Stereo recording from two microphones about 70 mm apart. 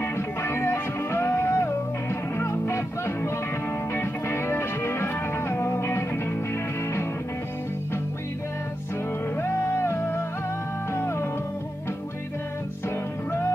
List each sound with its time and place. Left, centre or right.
0.0 s music: left
9.4 s music: left